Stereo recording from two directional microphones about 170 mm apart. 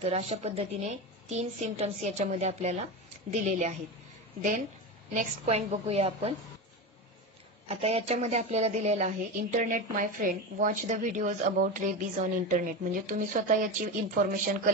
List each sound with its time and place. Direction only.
0.0 s a woman's voice: 35° right (ahead or behind)
7.6 s a woman's voice: 35° right (ahead or behind); by 14.7 s 55° right (ahead or behind)